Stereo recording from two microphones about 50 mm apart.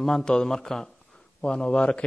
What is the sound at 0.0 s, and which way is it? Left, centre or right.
A man's voice, centre.